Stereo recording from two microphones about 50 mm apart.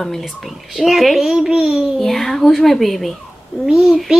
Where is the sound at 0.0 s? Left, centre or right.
Centre.